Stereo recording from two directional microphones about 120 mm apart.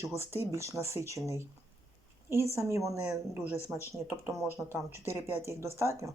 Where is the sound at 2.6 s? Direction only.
25° right (ahead or behind).